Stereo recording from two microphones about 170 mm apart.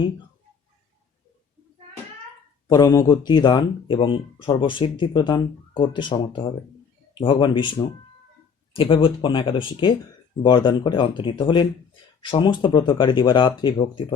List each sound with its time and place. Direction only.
2.6 s speech: 20° left (ahead or behind)